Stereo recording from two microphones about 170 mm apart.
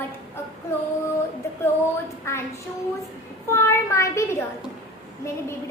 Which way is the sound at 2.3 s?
15° left (ahead or behind).